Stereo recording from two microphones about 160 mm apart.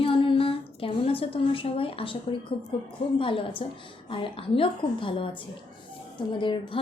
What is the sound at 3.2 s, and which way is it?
A woman's voice, 35° left (ahead or behind).